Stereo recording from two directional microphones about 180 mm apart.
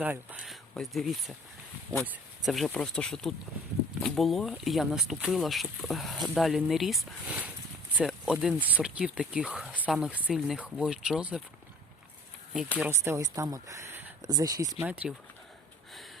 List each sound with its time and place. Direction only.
0.0 s speech: 10° right (ahead or behind)
12.8 s speech: 15° right (ahead or behind)
14.8 s speech: 5° right (ahead or behind)